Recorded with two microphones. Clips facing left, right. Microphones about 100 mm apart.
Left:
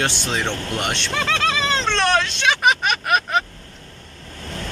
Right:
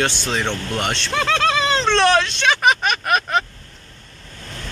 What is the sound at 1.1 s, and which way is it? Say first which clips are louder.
Speech: right 4 dB; centre (ahead or behind).